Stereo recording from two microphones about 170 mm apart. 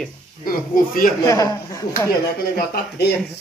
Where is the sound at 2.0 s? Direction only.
65° left (ahead or behind).